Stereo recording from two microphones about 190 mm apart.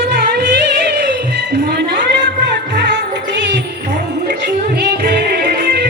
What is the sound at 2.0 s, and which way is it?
Music, 65° right (ahead or behind).